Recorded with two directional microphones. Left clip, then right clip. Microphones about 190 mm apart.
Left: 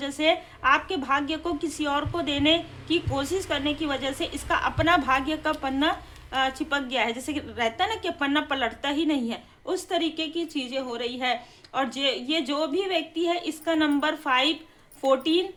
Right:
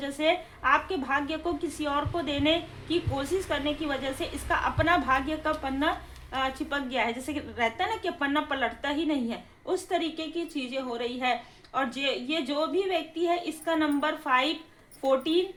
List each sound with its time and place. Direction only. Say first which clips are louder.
0.0 s a woman's voice: left 3 dB; 20° left (ahead or behind)